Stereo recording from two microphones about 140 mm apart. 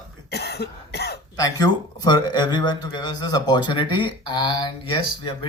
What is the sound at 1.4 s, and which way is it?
Speech, 25° left (ahead or behind).